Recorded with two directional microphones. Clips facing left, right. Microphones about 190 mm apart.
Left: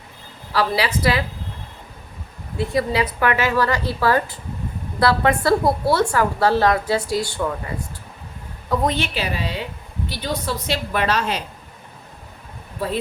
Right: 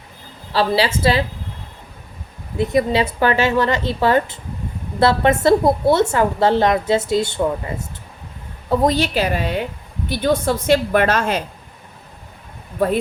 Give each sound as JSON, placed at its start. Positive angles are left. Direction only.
{"t": 0.5, "sound": "a woman's voice", "side_deg": -25}
{"t": 2.6, "sound": "a woman's voice", "side_deg": -20}
{"t": 8.7, "sound": "a woman's voice", "side_deg": -35}